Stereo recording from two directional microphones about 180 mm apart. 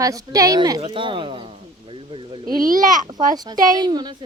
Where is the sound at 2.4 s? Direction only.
50° right (ahead or behind).